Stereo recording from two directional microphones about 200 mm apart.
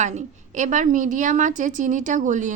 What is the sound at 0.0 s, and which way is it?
A woman's voice, 35° right (ahead or behind).